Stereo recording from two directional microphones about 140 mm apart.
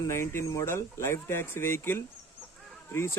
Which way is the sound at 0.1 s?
20° left (ahead or behind).